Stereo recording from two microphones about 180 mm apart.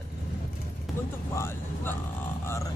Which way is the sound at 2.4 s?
15° left (ahead or behind).